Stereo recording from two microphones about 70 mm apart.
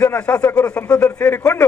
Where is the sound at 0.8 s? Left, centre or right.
Left.